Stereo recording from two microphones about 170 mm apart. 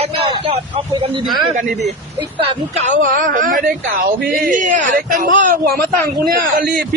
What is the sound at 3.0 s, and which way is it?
A man's voice, 55° right (ahead or behind).